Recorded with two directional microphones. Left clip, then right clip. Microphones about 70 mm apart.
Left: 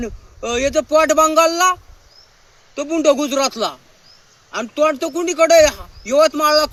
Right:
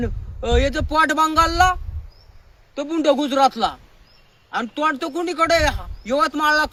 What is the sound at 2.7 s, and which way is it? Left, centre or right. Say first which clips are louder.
A man's voice: left 3 dB; right.